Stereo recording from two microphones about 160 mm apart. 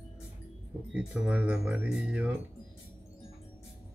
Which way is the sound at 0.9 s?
5° right (ahead or behind).